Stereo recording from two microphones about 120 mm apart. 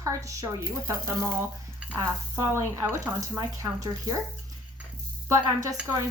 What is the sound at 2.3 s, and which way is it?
Speech, 25° right (ahead or behind).